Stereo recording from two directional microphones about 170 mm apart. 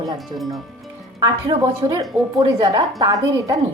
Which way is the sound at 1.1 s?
20° right (ahead or behind).